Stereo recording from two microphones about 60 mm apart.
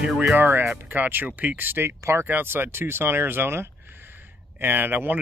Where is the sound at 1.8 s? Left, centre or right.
Right.